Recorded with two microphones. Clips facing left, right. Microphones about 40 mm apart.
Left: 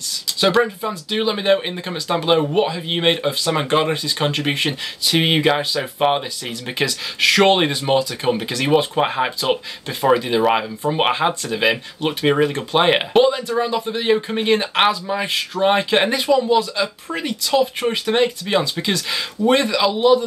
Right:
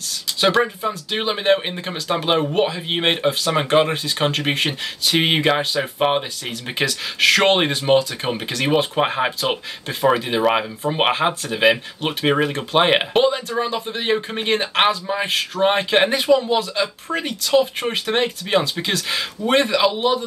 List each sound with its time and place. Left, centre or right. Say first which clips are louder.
0.4 s speech: left 1 dB; centre